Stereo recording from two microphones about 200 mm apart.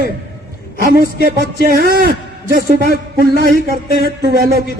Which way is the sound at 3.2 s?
50° right (ahead or behind).